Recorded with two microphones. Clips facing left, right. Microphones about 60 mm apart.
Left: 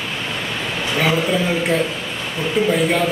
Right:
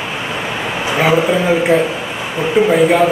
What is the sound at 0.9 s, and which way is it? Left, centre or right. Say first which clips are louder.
A man's voice: right 5 dB; centre.